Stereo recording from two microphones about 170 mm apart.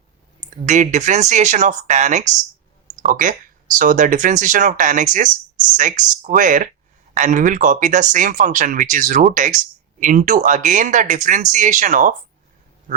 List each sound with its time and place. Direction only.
0.6 s speech: 45° right (ahead or behind)